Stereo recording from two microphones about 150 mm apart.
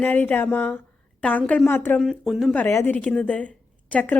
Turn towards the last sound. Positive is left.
turn(degrees=10)  # may be behind; listen again after turning